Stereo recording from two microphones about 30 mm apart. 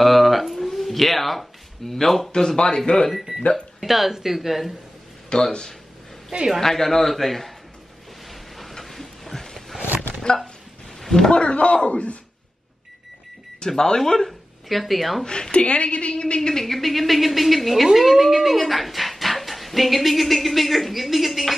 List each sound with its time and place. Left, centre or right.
0.0 s a sound: centre
2.3 s speech: left
3.3 s speech: centre
3.8 s speech: centre
5.3 s speech: left
6.6 s a man's voice: centre
8.3 s a sound: centre
11.0 s a sound: centre
11.3 s speech: left
13.7 s a man's voice: centre
14.7 s speech: centre
15.5 s speech: left
16.2 s speech: left
16.6 s speech: centre